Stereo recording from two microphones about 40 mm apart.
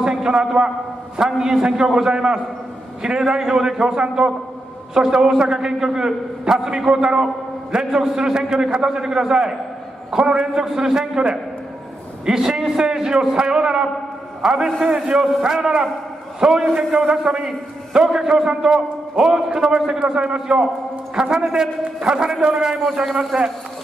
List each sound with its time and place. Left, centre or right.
0.0 s a man's voice: centre
15.4 s a man's voice: centre
16.6 s a man's voice: centre